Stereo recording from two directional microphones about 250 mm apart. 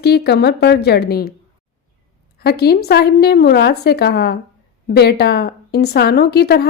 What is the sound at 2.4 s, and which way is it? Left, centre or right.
A woman's voice, left.